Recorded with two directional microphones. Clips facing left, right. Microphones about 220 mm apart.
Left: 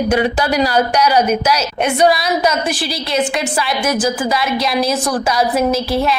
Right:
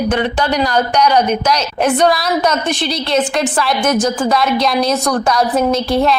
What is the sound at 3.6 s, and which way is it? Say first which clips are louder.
A woman's voice: right 2 dB; centre (ahead or behind).